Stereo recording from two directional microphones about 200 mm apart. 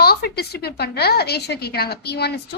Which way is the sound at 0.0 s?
50° left (ahead or behind).